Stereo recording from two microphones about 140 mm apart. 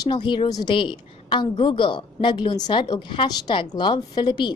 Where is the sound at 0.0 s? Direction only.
30° left (ahead or behind).